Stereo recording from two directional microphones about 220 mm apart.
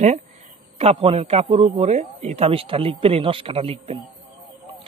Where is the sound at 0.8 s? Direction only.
25° right (ahead or behind).